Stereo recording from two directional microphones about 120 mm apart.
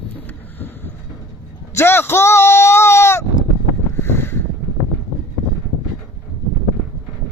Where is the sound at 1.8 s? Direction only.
20° left (ahead or behind).